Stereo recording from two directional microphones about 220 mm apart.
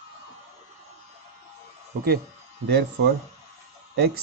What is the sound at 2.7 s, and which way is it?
Speech, 50° right (ahead or behind).